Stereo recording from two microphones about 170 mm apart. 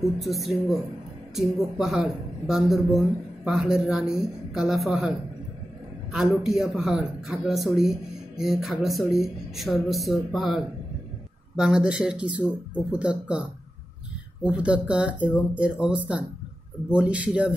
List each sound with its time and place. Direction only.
0.2 s speech: centre (ahead or behind)
6.1 s speech: centre (ahead or behind)